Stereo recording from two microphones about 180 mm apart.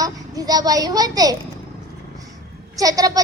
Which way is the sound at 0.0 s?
20° right (ahead or behind).